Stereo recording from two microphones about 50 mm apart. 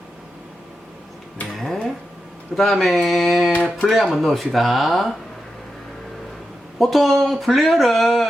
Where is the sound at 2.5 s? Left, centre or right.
Centre.